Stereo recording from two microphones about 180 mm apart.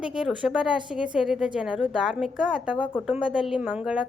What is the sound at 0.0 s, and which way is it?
A woman's voice, 5° right (ahead or behind).